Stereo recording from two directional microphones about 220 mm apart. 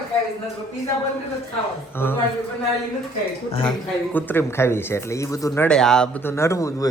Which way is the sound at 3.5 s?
25° left (ahead or behind).